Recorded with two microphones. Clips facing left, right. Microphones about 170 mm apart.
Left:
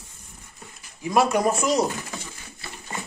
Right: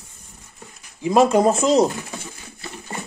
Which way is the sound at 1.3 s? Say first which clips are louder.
Right 6 dB; 25° right (ahead or behind).